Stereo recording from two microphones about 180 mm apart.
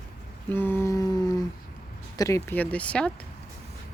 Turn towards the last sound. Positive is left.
turn(degrees=5)  # may be behind; listen again after turning